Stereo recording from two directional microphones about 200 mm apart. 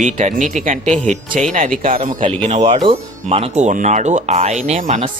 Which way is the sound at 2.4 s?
30° right (ahead or behind).